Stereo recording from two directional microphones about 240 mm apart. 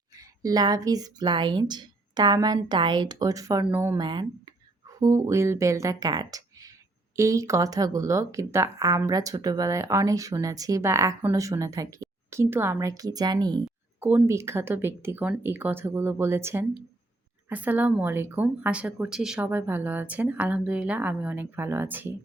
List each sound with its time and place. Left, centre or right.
0.1 s a woman's voice: centre
13.7 s speech: centre